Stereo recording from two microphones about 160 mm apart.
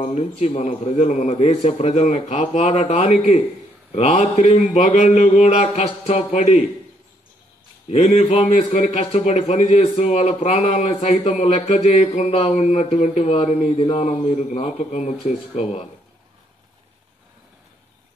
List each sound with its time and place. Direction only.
0.0 s speech: 45° left (ahead or behind)
7.9 s speech: 45° left (ahead or behind)